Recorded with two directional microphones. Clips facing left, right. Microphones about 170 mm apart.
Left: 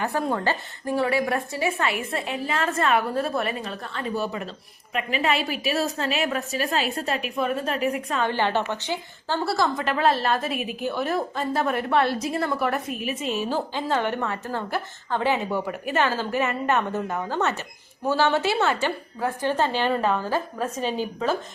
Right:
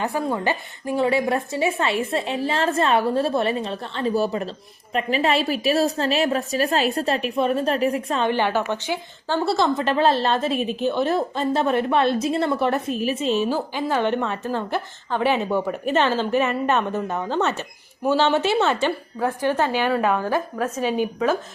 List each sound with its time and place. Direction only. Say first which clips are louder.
0.3 s a woman's voice: right 2 dB; 20° right (ahead or behind)
8.3 s a woman's voice: right 3 dB; 15° right (ahead or behind)
13.5 s a woman's voice: right 2 dB; 10° right (ahead or behind)